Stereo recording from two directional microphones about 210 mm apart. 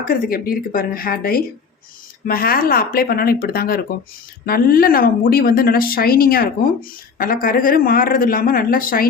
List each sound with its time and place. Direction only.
0.0 s speech: 45° left (ahead or behind)